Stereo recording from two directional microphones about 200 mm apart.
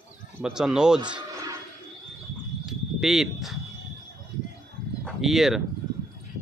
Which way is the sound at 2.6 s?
Centre (ahead or behind).